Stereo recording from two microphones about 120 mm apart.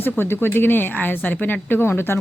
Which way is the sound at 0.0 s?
20° left (ahead or behind).